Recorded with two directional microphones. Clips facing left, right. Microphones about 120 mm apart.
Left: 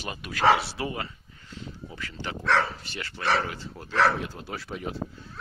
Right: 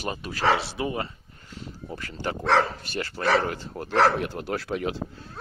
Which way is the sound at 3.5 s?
55° right (ahead or behind).